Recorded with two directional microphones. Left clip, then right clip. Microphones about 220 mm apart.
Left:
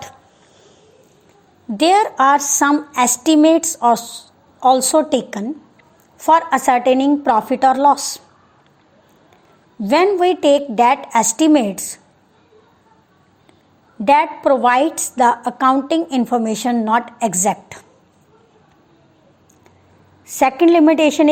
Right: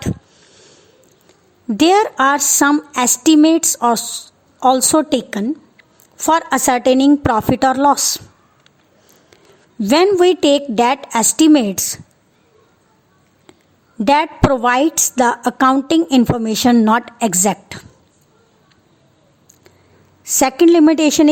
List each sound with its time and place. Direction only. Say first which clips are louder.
1.8 s a woman's voice: even; 50° right (ahead or behind)
9.8 s a woman's voice: right 2 dB; 50° right (ahead or behind)
14.0 s a woman's voice: even; 50° right (ahead or behind)
20.2 s a woman's voice: right 1 dB; 30° right (ahead or behind)